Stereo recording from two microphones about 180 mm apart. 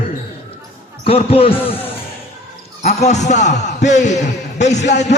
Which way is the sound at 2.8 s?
35° left (ahead or behind).